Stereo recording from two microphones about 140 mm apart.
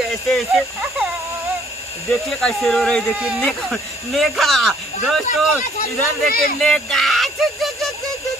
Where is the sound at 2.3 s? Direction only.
5° left (ahead or behind).